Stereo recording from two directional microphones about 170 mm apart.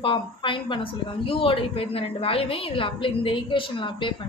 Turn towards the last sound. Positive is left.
turn(degrees=30)  # may be behind; listen again after turning